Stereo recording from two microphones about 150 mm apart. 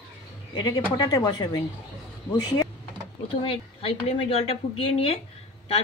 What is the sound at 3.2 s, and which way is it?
A woman's voice, 35° left (ahead or behind).